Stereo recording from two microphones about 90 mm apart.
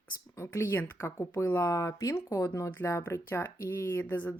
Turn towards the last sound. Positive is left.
turn(degrees=20)  # may be behind; listen again after turning